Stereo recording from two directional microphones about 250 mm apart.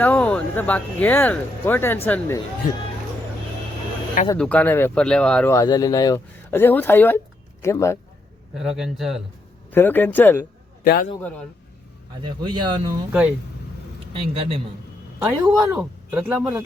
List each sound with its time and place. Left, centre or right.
0.0 s speech: centre
4.3 s speech: centre
8.5 s speech: centre
10.8 s a man's voice: left
11.2 s speech: centre
12.2 s speech: centre
14.1 s a man's voice: right
15.2 s speech: centre